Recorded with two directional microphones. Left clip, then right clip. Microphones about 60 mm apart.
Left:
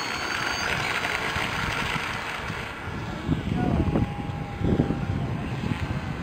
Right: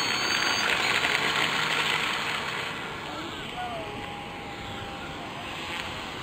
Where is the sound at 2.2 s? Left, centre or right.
Centre.